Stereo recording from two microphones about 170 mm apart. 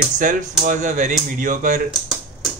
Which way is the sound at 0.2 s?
50° right (ahead or behind).